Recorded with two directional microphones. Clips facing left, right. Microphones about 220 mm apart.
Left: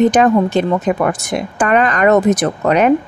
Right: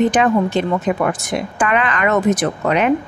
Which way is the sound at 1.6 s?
40° left (ahead or behind).